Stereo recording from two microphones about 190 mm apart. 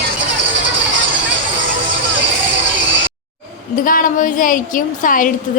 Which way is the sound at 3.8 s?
45° left (ahead or behind).